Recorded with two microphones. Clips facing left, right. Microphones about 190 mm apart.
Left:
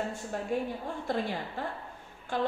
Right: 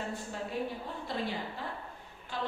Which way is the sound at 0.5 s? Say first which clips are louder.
Left 5 dB; 50° left (ahead or behind).